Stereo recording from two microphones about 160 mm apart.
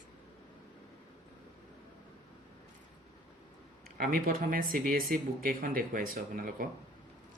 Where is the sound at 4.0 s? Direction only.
65° right (ahead or behind).